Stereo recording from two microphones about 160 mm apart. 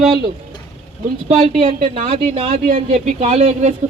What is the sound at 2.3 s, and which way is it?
Speech, 45° right (ahead or behind).